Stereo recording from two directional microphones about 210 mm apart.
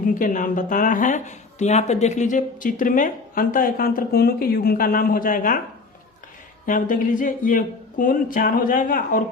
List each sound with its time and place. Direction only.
0.0 s speech: 40° left (ahead or behind)
6.7 s speech: 40° left (ahead or behind)